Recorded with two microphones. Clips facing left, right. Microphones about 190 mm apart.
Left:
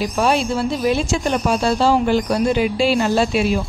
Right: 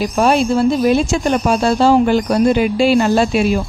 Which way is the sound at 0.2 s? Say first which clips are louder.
Right 6 dB; 50° right (ahead or behind).